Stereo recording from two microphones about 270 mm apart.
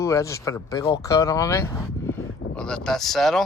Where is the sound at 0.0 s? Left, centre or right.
Centre.